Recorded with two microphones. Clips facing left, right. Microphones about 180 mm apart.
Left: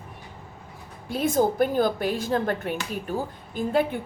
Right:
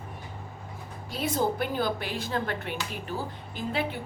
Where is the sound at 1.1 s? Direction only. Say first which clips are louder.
Left 5 dB; 50° left (ahead or behind).